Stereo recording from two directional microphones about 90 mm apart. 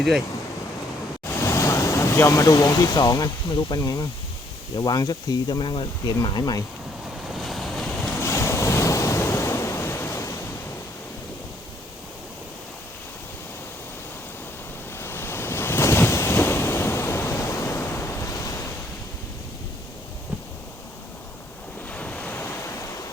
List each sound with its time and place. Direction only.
1.3 s speech: 30° left (ahead or behind); by 6.1 s 65° left (ahead or behind)
6.2 s speech: 50° left (ahead or behind)
7.3 s waves: centre (ahead or behind)
8.2 s waves: 30° left (ahead or behind)
14.9 s waves: 25° left (ahead or behind)
21.8 s waves: 15° left (ahead or behind)